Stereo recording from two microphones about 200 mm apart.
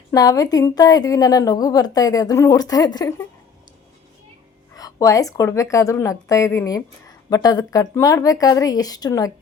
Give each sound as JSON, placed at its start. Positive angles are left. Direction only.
{"t": 0.1, "sound": "a woman's voice", "side_deg": 20}
{"t": 4.7, "sound": "a woman's voice", "side_deg": 15}